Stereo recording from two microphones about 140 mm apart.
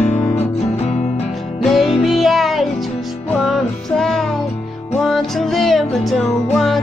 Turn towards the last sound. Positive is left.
turn(degrees=0)  # may be behind; listen again after turning